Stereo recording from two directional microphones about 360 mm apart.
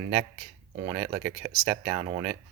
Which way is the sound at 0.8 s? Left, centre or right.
Right.